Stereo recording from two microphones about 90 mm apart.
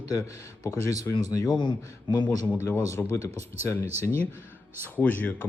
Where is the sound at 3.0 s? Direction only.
20° left (ahead or behind).